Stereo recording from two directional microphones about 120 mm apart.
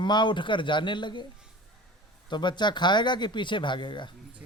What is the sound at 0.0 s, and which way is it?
Speech, 40° left (ahead or behind).